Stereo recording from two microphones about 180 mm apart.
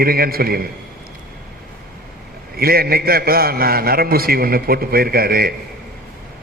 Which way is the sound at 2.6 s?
55° right (ahead or behind).